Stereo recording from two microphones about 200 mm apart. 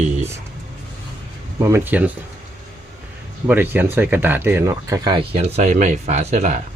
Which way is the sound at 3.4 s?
10° right (ahead or behind).